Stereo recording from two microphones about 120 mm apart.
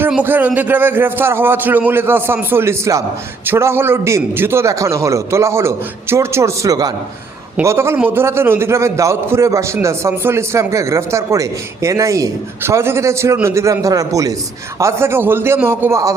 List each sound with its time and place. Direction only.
0.1 s a man's voice: 15° right (ahead or behind)